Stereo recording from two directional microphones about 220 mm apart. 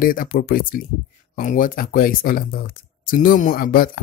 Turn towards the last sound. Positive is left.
turn(degrees=40)  # may be behind; listen again after turning